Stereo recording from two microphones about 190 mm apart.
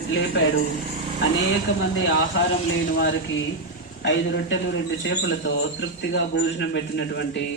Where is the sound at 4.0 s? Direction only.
70° left (ahead or behind).